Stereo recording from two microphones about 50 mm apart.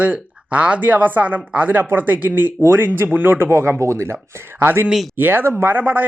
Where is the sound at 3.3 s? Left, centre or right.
Right.